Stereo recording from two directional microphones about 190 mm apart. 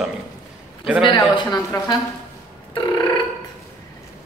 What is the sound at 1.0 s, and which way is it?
Speech, 20° left (ahead or behind).